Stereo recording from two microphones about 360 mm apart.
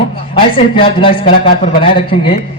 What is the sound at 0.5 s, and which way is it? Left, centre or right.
Speech, centre.